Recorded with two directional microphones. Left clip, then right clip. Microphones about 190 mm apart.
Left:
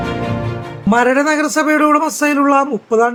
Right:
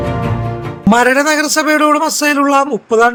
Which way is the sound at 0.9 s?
35° right (ahead or behind).